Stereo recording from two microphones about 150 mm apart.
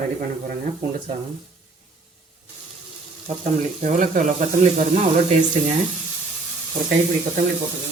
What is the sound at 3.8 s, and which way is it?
Speech, 55° right (ahead or behind).